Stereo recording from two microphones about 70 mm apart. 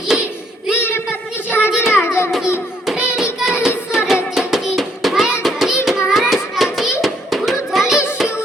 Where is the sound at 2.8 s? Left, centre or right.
Centre.